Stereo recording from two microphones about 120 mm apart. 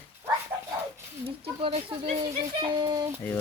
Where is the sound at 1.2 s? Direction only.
50° right (ahead or behind).